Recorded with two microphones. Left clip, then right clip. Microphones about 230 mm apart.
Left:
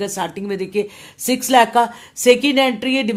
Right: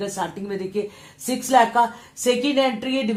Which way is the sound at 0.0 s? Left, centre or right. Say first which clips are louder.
Left 4 dB; left.